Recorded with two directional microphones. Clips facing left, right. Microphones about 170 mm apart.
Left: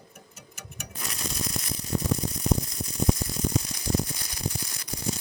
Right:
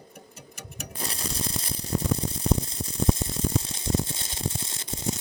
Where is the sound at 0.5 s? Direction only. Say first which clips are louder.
Right 3 dB; 30° right (ahead or behind).